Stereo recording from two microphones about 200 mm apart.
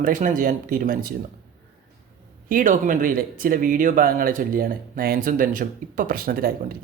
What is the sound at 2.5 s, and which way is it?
Speech, 40° right (ahead or behind).